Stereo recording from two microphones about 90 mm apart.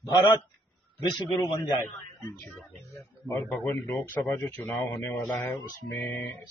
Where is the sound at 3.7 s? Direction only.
30° left (ahead or behind).